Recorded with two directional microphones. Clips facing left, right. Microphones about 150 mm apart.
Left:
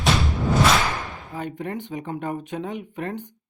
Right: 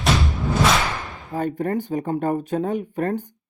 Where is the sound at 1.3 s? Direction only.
40° right (ahead or behind).